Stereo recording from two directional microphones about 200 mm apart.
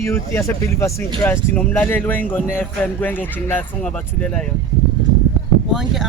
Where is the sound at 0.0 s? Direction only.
15° left (ahead or behind).